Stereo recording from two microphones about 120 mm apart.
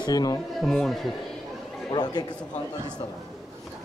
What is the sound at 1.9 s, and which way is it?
Speech, 35° left (ahead or behind).